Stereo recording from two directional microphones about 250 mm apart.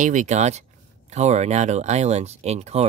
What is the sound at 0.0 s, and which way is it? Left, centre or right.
Speech, right.